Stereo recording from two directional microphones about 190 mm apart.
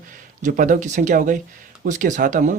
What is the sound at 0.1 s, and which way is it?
Speech, 45° right (ahead or behind).